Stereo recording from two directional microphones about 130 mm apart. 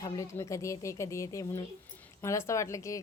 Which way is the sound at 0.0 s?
25° left (ahead or behind).